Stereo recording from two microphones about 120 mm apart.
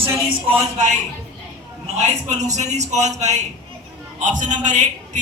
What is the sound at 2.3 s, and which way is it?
A man's voice, 80° right.